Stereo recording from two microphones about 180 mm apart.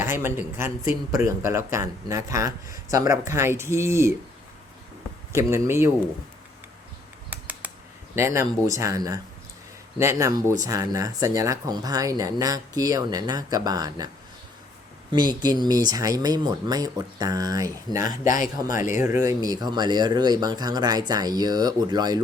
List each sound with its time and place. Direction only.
0.0 s a man's voice: 15° right (ahead or behind)
5.3 s a man's voice: 15° right (ahead or behind)
7.3 s a sound: 10° right (ahead or behind)
8.1 s a man's voice: 15° right (ahead or behind)
15.1 s speech: 25° right (ahead or behind)
18.7 s speech: 45° left (ahead or behind)
18.9 s a man's voice: 15° right (ahead or behind)